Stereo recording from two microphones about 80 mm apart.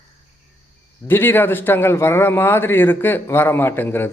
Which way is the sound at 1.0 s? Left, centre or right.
Left.